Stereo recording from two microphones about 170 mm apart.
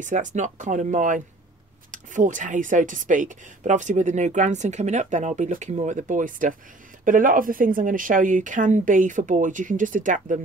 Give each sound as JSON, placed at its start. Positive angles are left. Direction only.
{"t": 0.0, "sound": "speech", "side_deg": -45}